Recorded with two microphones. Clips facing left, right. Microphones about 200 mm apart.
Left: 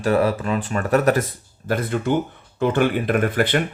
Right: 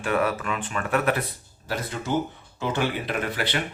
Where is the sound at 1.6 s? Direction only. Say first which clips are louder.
Left 8 dB; 55° left (ahead or behind).